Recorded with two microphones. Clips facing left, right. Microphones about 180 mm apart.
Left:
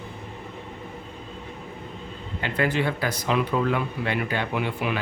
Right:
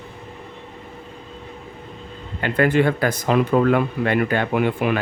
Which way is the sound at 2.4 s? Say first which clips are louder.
Right 7 dB; 55° right (ahead or behind).